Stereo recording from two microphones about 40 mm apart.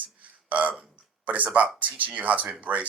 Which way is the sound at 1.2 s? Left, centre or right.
Right.